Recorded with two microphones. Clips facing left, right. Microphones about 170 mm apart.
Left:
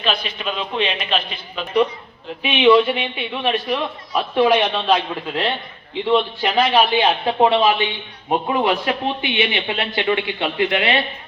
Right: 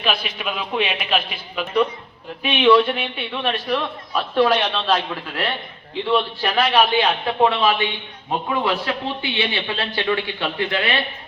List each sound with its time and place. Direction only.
0.0 s a man's voice: 5° right (ahead or behind)
2.4 s a man's voice: 5° left (ahead or behind)
6.1 s a man's voice: 15° left (ahead or behind)